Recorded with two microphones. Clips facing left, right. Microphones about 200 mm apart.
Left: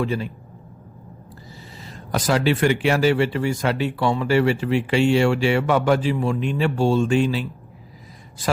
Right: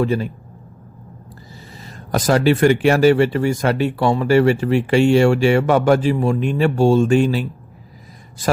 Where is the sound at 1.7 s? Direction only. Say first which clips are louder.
Right 4 dB; 45° right (ahead or behind).